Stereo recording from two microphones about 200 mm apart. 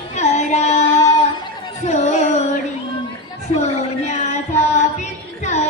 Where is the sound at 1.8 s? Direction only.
35° left (ahead or behind).